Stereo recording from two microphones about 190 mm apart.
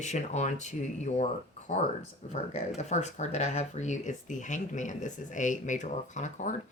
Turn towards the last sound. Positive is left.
turn(degrees=40)  # may be behind; listen again after turning